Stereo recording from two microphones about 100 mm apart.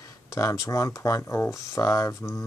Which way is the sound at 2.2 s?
25° left (ahead or behind).